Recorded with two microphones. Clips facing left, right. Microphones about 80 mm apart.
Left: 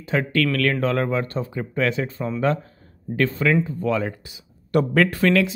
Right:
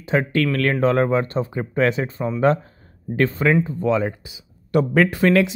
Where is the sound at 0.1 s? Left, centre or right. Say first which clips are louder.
Right 2 dB; right.